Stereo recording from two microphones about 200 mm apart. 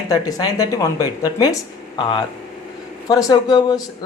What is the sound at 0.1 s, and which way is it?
Speech, 20° left (ahead or behind).